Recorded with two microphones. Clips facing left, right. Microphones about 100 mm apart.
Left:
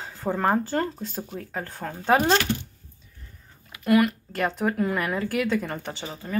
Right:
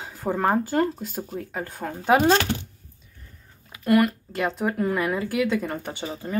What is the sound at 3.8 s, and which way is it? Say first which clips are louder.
Speech: right 1 dB; centre (ahead or behind).